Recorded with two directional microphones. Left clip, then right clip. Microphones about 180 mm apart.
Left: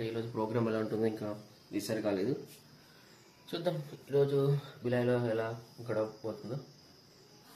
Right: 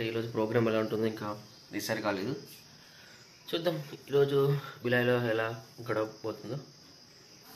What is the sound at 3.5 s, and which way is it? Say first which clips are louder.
Speech: right 4 dB; 10° left (ahead or behind).